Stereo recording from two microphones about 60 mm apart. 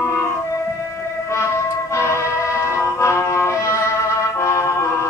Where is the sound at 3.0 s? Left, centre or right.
Left.